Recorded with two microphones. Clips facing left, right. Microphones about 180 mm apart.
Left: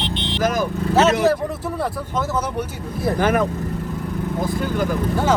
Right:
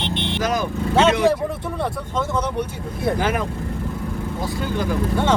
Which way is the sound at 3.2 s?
50° left (ahead or behind).